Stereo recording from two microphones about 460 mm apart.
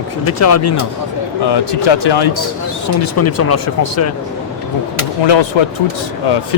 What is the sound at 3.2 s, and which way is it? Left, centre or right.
Speech, left.